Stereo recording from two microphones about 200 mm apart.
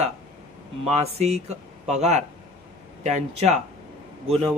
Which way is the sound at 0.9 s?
35° right (ahead or behind).